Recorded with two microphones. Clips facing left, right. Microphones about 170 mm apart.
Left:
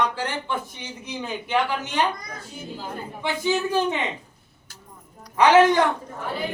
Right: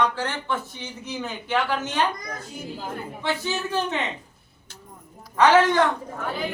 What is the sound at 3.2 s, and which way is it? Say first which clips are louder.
Speech: left 4 dB; 15° left (ahead or behind).